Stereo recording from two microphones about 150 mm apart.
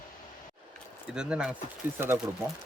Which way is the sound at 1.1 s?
5° right (ahead or behind).